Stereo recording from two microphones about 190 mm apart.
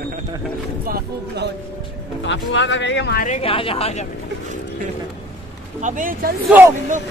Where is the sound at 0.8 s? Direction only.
50° right (ahead or behind).